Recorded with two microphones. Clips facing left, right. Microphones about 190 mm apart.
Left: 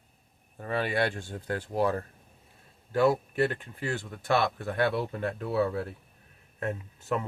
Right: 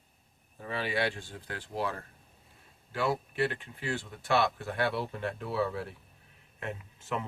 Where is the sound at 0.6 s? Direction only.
50° left (ahead or behind).